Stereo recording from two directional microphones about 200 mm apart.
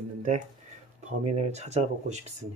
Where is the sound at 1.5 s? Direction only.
35° right (ahead or behind).